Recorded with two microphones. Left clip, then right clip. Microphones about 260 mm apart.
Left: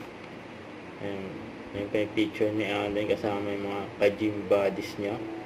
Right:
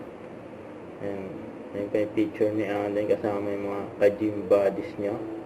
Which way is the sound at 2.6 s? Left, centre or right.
Left.